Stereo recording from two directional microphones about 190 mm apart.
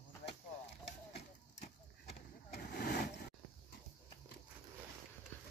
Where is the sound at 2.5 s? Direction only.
55° left (ahead or behind).